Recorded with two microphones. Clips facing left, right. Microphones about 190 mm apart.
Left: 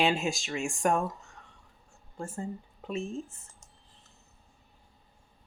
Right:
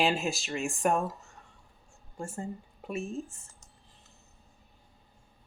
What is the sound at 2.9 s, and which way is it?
Speech, 10° right (ahead or behind).